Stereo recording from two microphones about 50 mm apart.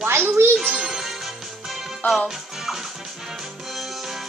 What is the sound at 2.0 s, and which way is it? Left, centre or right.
Speech, left.